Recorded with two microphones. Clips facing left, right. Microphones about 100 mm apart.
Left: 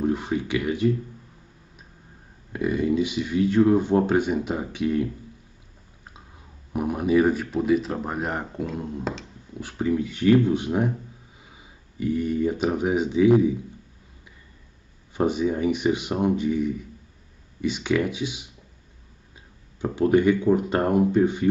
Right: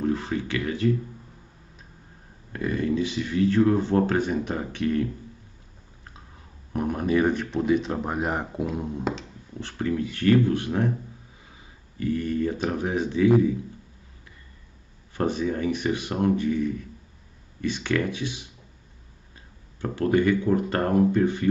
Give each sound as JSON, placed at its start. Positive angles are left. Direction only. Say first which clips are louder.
{"t": 0.0, "sound": "speech", "louder": "left 2 dB", "side_deg": 15}
{"t": 2.5, "sound": "speech", "louder": "left 3 dB", "side_deg": 15}
{"t": 6.7, "sound": "speech", "louder": "left 2 dB", "side_deg": 10}
{"t": 9.6, "sound": "speech", "louder": "left 2 dB", "side_deg": 10}
{"t": 12.0, "sound": "speech", "louder": "left 2 dB", "side_deg": 15}
{"t": 15.1, "sound": "speech", "louder": "left 3 dB", "side_deg": 15}
{"t": 19.8, "sound": "speech", "louder": "left 3 dB", "side_deg": 15}